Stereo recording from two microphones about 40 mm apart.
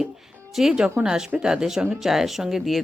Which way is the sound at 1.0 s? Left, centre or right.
Centre.